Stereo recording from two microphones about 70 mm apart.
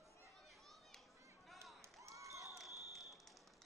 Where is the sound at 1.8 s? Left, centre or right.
Right.